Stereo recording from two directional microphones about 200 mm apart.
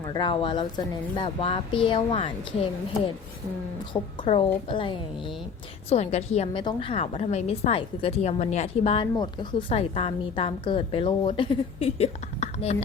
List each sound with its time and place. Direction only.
0.0 s a woman's voice: 20° left (ahead or behind)
4.2 s a woman's voice: 25° left (ahead or behind)